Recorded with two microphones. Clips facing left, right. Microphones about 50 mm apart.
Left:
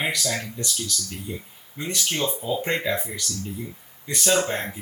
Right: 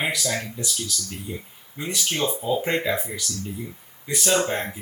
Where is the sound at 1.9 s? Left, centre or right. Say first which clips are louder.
Even; right.